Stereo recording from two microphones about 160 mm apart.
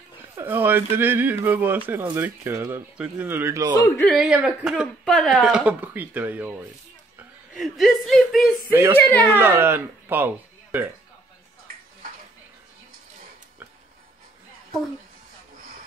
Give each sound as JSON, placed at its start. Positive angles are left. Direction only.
{"t": 0.4, "sound": "speech", "side_deg": -10}
{"t": 3.8, "sound": "speech", "side_deg": 15}
{"t": 4.1, "sound": "speech", "side_deg": -5}
{"t": 9.4, "sound": "speech", "side_deg": -15}